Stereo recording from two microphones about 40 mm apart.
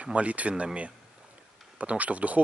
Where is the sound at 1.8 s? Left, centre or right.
Right.